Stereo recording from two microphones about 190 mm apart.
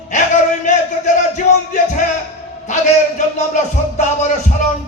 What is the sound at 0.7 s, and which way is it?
Music, 40° left (ahead or behind).